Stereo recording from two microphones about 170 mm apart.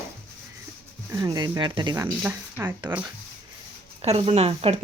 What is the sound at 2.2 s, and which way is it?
Speech, 10° right (ahead or behind).